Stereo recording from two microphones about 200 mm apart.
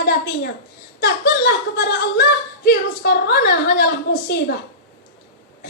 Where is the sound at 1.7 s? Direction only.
60° left (ahead or behind).